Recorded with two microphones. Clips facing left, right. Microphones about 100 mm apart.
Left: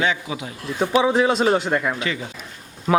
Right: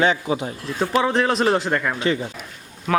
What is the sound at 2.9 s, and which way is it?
Speech, 10° left (ahead or behind).